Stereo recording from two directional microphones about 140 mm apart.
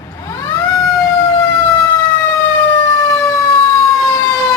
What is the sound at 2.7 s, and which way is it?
Emergency vehicle, 35° left (ahead or behind).